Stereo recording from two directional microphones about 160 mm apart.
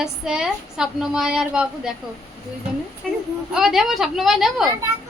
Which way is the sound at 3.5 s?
5° right (ahead or behind).